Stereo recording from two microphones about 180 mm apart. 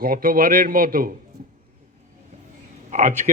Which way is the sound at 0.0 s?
55° right (ahead or behind).